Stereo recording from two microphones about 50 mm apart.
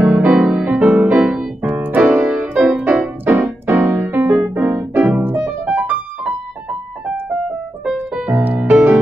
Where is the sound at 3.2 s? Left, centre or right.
Right.